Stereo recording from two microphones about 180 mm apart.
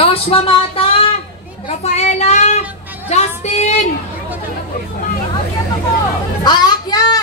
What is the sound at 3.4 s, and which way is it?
Speech, 40° left (ahead or behind).